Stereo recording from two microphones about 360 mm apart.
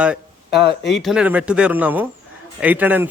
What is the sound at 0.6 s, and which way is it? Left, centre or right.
Speech, left.